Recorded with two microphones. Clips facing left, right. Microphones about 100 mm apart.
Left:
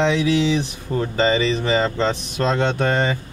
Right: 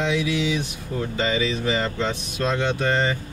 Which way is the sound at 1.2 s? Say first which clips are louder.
Left 5 dB; 65° left (ahead or behind).